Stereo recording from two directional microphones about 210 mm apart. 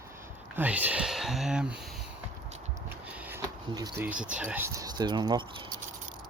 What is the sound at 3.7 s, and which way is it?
Speech, 20° right (ahead or behind).